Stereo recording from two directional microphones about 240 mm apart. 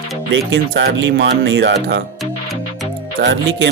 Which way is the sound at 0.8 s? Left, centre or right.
Right.